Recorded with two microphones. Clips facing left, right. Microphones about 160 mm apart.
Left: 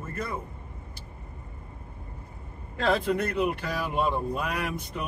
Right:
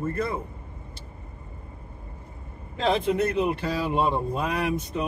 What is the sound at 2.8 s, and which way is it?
Speech, 20° right (ahead or behind).